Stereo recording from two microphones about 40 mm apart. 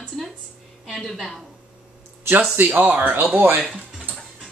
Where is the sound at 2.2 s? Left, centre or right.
Right.